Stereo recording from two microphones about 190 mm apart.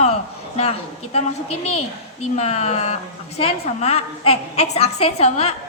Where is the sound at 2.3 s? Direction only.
35° left (ahead or behind).